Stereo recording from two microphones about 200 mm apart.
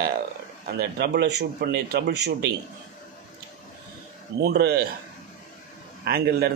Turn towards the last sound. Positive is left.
turn(degrees=-50)  # may be behind; listen again after turning